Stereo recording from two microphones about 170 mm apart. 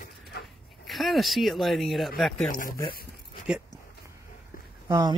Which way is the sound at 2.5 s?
60° left (ahead or behind).